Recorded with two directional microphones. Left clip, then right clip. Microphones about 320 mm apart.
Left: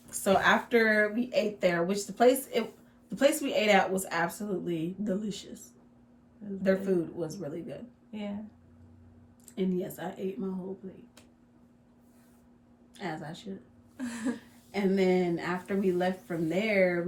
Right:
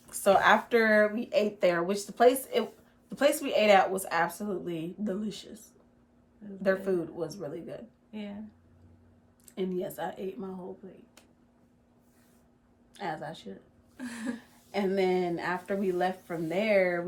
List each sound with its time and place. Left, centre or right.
0.1 s speech: centre
8.1 s speech: centre
9.6 s speech: centre
13.0 s speech: centre
13.9 s a sound: centre
14.7 s speech: centre